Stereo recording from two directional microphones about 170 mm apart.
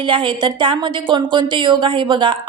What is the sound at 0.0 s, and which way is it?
Speech, 30° right (ahead or behind).